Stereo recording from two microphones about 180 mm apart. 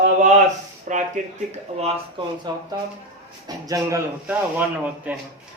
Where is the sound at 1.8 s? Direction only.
25° right (ahead or behind).